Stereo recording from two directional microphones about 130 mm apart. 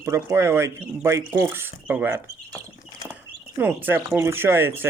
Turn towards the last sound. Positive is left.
turn(degrees=-15)  # may be behind; listen again after turning